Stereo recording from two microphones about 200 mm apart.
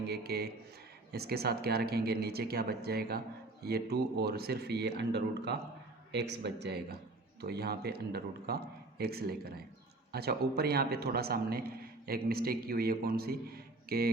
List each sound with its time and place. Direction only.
0.0 s a man's voice: 55° right (ahead or behind)